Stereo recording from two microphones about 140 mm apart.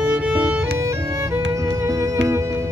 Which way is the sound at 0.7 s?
20° right (ahead or behind).